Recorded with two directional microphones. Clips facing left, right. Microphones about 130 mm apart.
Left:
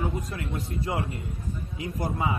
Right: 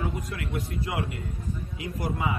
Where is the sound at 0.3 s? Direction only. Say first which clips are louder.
Even; 30° left (ahead or behind).